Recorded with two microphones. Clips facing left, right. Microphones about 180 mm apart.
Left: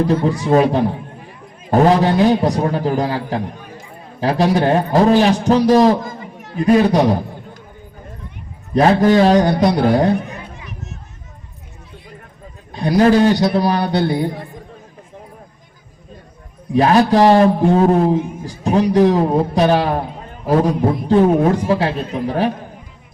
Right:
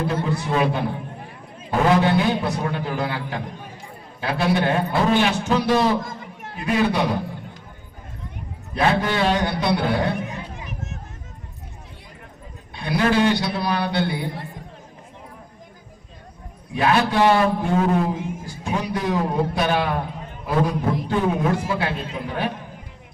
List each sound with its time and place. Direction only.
0.0 s a man's voice: 40° left (ahead or behind)
8.7 s a man's voice: 40° left (ahead or behind)
12.7 s a man's voice: 40° left (ahead or behind)
16.7 s a man's voice: 40° left (ahead or behind)
21.1 s a man's voice: 40° left (ahead or behind)